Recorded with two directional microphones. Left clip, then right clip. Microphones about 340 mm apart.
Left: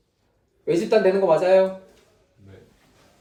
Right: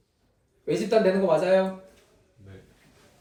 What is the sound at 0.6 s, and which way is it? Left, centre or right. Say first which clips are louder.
Speech: left 5 dB; left.